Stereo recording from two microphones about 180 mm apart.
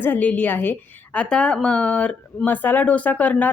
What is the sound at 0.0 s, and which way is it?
A woman's voice, 10° left (ahead or behind).